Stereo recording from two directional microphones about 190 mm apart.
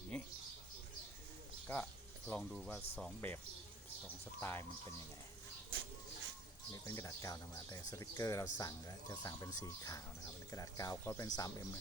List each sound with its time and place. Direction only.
1.6 s speech: 5° left (ahead or behind)
4.4 s speech: 10° left (ahead or behind)
6.8 s speech: 15° left (ahead or behind)